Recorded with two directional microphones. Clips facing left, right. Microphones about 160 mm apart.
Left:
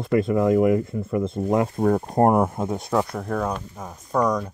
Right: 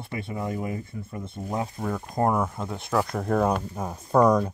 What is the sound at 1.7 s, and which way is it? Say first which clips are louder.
Speech: left 9 dB; 50° left (ahead or behind).